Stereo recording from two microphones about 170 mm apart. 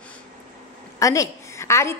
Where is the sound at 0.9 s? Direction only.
20° left (ahead or behind).